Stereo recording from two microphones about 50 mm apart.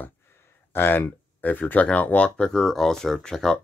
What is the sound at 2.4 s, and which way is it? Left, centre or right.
Speech, centre.